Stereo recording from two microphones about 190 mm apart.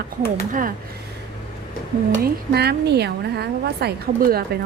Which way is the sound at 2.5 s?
60° right (ahead or behind).